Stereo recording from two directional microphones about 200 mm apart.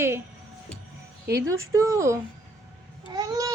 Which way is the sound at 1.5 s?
85° right.